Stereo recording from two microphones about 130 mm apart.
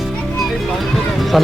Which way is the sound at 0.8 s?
Centre (ahead or behind).